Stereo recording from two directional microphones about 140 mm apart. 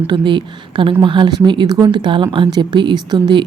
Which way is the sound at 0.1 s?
35° right (ahead or behind).